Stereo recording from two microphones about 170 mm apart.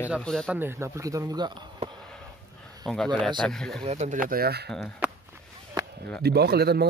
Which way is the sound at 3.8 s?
40° right (ahead or behind).